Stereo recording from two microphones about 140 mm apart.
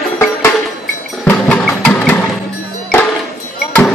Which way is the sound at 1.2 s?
10° left (ahead or behind).